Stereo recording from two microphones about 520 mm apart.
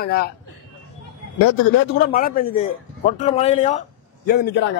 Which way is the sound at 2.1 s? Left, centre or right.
Centre.